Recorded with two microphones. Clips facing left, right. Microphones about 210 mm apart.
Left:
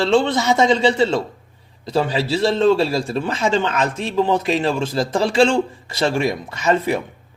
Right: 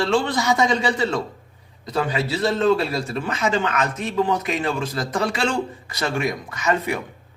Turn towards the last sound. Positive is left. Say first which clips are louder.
# left 4 dB
turn(degrees=30)  # may be behind; listen again after turning